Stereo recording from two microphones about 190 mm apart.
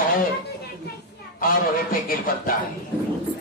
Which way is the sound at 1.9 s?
50° left (ahead or behind).